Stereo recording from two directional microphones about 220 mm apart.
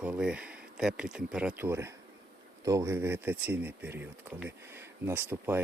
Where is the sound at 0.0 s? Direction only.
5° right (ahead or behind).